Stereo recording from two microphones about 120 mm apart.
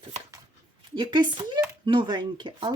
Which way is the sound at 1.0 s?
40° right (ahead or behind).